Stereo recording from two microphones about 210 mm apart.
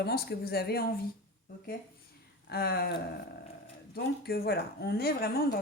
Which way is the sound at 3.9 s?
50° left (ahead or behind).